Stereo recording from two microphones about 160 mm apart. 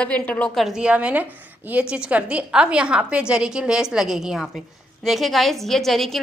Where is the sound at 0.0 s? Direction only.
10° left (ahead or behind).